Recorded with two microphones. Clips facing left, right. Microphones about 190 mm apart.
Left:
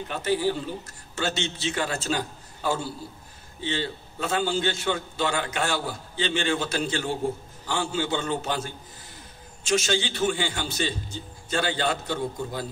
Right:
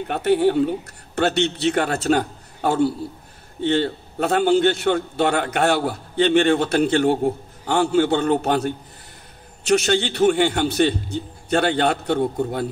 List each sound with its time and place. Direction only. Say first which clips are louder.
0.1 s a man's voice: right 8 dB; 65° right (ahead or behind)